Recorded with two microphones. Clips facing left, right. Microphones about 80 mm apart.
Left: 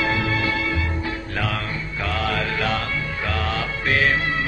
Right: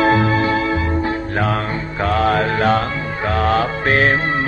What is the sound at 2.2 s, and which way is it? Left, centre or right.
Music, right.